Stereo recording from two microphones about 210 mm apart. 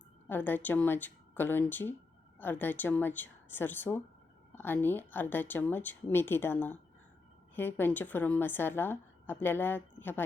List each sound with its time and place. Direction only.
0.3 s a woman's voice: 10° left (ahead or behind)